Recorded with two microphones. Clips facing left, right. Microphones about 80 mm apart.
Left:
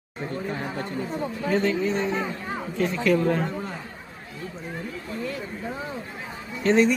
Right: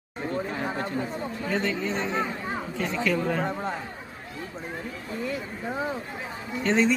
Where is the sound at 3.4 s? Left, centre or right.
Right.